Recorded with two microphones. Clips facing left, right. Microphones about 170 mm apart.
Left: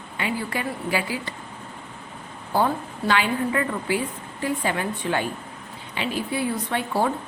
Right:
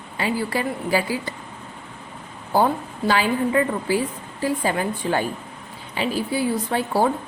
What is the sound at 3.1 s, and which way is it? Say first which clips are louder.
A woman's voice: right 3 dB; 35° right (ahead or behind).